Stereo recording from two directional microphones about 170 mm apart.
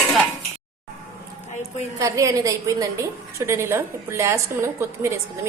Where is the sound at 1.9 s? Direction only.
20° right (ahead or behind).